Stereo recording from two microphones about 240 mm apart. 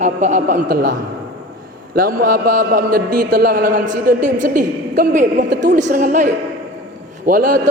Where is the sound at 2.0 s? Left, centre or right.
Right.